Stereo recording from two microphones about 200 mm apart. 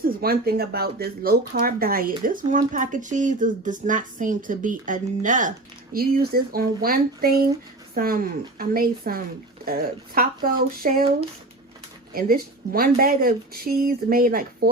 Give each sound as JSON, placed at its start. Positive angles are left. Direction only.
{"t": 0.0, "sound": "speech", "side_deg": -50}
{"t": 12.1, "sound": "speech", "side_deg": -45}